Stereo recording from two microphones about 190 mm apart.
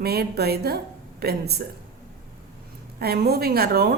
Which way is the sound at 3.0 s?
55° right (ahead or behind).